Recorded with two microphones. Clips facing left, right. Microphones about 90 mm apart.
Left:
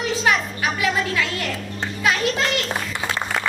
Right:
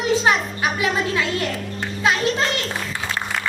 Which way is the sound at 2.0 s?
30° right (ahead or behind).